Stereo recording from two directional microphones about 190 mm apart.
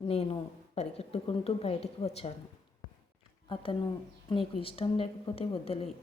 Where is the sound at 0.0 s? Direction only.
30° left (ahead or behind).